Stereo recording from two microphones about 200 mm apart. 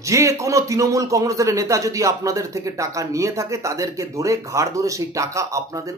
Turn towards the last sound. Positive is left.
turn(degrees=-15)  # may be behind; listen again after turning